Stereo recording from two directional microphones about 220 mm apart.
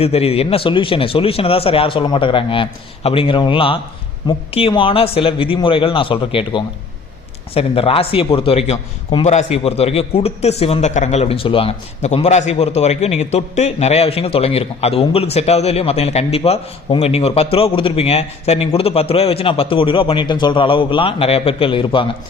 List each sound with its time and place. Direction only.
0.0 s a man's voice: 25° left (ahead or behind)